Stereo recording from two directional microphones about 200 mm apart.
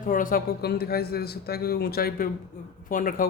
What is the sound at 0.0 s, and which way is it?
Speech, 45° left (ahead or behind).